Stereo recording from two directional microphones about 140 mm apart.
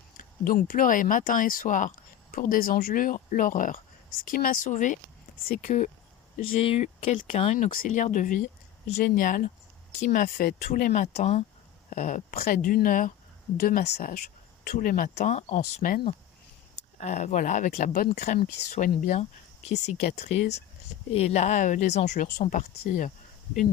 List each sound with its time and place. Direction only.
0.2 s speech: 80° left
2.3 s speech: 85° left; by 5.9 s 55° left (ahead or behind)
6.6 s speech: 45° left (ahead or behind); by 8.4 s 65° left (ahead or behind)
9.1 s speech: 80° left; by 11.4 s 50° left (ahead or behind)
11.9 s speech: 65° left (ahead or behind)
13.6 s speech: 90° left; by 23.1 s 65° left (ahead or behind)